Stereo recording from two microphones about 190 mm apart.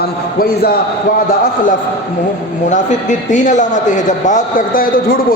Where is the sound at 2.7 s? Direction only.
40° left (ahead or behind).